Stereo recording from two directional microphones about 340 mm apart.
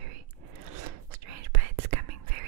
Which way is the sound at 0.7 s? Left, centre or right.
Right.